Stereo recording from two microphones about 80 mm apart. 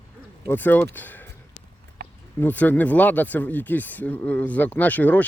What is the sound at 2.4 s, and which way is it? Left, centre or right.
Speech, left.